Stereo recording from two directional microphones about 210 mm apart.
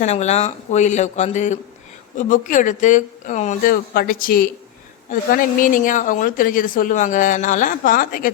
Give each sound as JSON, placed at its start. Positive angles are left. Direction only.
{"t": 0.0, "sound": "speech", "side_deg": 30}